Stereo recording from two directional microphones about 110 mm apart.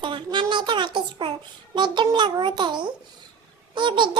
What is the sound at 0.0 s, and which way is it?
Baby laughter, 45° right (ahead or behind).